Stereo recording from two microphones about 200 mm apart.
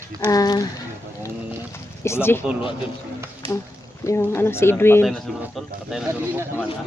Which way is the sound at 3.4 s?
25° right (ahead or behind).